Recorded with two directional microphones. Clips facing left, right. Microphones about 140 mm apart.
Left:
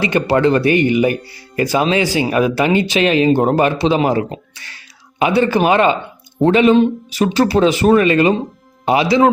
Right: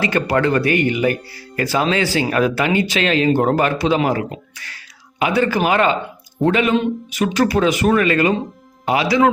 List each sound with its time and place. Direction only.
0.0 s speech: 20° left (ahead or behind)